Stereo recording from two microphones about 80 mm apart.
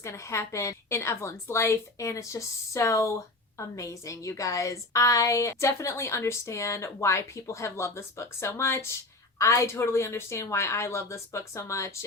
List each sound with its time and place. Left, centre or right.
0.0 s a woman's voice: left